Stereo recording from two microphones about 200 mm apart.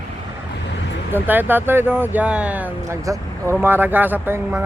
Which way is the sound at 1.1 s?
10° right (ahead or behind).